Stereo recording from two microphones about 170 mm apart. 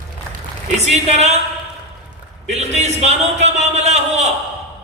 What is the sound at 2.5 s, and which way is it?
A man's voice, 40° right (ahead or behind).